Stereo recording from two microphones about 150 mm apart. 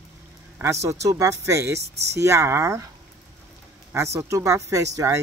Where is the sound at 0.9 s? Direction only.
20° right (ahead or behind).